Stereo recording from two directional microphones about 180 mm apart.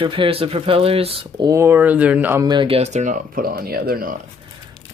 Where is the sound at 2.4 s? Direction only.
30° right (ahead or behind); by 4.1 s 55° right (ahead or behind).